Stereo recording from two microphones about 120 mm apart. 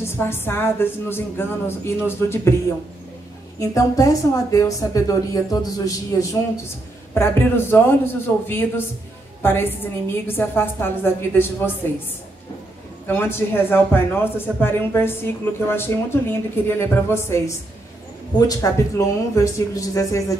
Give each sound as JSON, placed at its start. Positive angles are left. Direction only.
{"t": 0.2, "sound": "speech", "side_deg": 20}
{"t": 3.5, "sound": "a woman's voice", "side_deg": 25}
{"t": 13.0, "sound": "speech", "side_deg": 20}